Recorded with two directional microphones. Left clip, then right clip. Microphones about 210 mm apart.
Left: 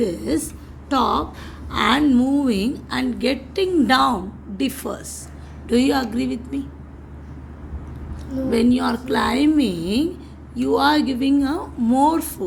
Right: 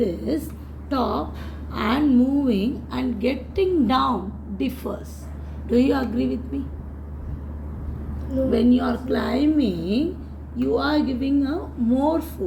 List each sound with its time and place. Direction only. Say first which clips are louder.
0.0 s a woman's voice: left 2 dB; 30° left (ahead or behind)
8.4 s a woman's voice: left 2 dB; 35° left (ahead or behind)